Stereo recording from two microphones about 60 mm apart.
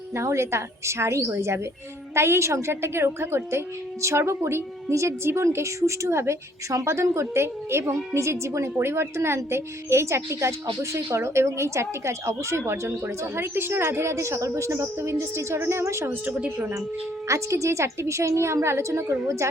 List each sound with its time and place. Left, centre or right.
0.1 s a woman's voice: right
17.2 s a woman's voice: right